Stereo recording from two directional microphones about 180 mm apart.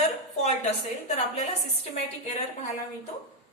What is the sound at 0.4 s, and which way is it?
A woman's voice, 40° left (ahead or behind).